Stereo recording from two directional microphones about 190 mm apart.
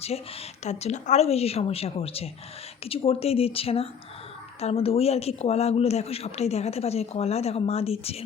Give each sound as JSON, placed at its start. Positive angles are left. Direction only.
{"t": 0.6, "sound": "speech", "side_deg": 35}